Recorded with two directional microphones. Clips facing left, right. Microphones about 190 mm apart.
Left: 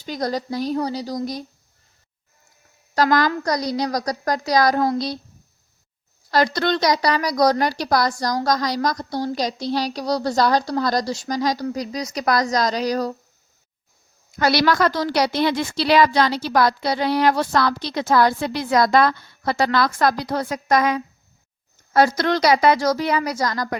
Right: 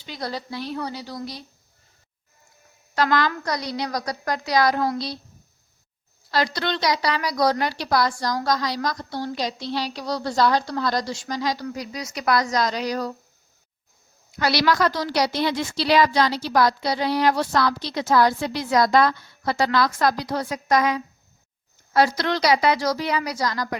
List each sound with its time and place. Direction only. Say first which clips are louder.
0.0 s a woman's voice: left 6 dB; 45° left (ahead or behind)
2.9 s a woman's voice: left 3 dB; 40° left (ahead or behind)
6.3 s a woman's voice: left 5 dB; 45° left (ahead or behind)
14.3 s a woman's voice: left 3 dB; 50° left (ahead or behind)